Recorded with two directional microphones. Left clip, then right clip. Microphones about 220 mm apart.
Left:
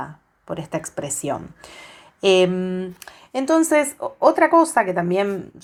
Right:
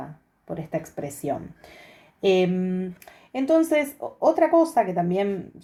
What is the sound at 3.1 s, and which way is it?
Speech, 15° left (ahead or behind).